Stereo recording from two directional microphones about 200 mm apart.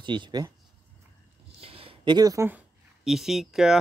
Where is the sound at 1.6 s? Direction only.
25° right (ahead or behind).